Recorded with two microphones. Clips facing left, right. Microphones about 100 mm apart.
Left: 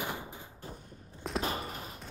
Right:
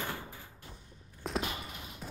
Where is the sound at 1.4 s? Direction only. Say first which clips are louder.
Left 5 dB; 40° left (ahead or behind).